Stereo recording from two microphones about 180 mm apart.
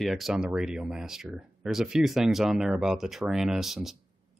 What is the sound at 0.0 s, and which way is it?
Speech, centre (ahead or behind).